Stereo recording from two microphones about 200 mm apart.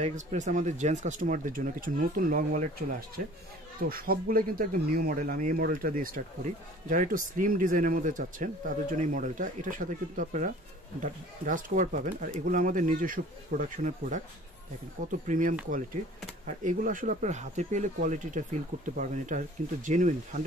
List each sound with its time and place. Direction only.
0.0 s speech: 35° right (ahead or behind)
3.9 s speech: 45° right (ahead or behind)